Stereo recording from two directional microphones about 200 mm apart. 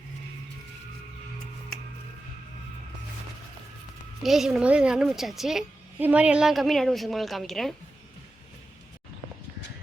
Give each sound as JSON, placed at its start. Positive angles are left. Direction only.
{"t": 4.2, "sound": "a woman's voice", "side_deg": 0}